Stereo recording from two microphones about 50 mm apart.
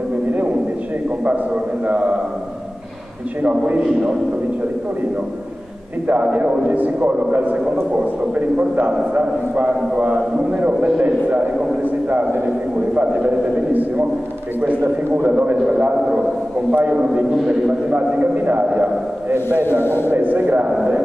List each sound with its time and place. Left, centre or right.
1.9 s a man's voice: right
3.4 s a man's voice: right
6.2 s a man's voice: right
15.2 s a man's voice: right
15.5 s a man's voice: centre; by 18.7 s right
19.8 s a man's voice: left
20.1 s a man's voice: right